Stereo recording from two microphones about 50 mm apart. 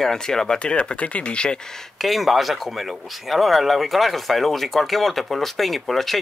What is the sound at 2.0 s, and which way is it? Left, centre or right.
Speech, centre.